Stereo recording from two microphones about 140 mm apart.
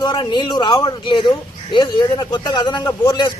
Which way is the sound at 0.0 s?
30° left (ahead or behind).